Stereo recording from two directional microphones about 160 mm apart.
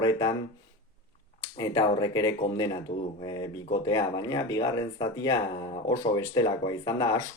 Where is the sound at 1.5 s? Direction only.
25° left (ahead or behind).